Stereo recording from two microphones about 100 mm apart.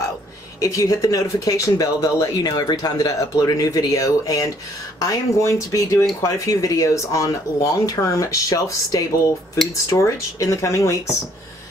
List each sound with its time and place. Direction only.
0.6 s speech: 35° left (ahead or behind)